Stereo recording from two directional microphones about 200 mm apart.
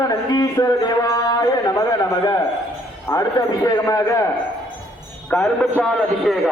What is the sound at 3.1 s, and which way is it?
A man's voice, 20° left (ahead or behind).